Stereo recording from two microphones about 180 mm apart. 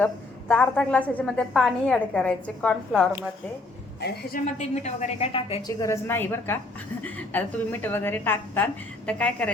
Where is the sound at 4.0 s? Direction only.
65° left (ahead or behind).